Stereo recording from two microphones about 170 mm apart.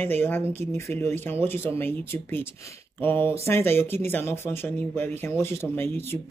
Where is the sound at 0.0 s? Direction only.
10° left (ahead or behind).